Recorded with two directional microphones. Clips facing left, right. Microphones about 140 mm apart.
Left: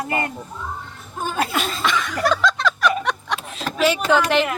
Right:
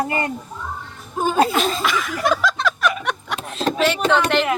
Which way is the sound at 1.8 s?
5° right (ahead or behind).